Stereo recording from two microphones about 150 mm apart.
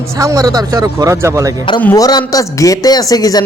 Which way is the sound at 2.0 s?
25° left (ahead or behind).